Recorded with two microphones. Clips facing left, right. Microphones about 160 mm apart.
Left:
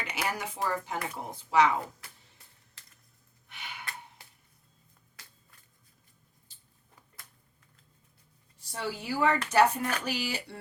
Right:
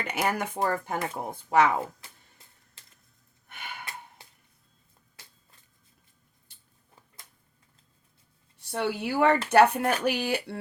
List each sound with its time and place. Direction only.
0.0 s speech: 50° right (ahead or behind)
3.4 s gasp: 50° right (ahead or behind)
8.5 s speech: 65° right (ahead or behind)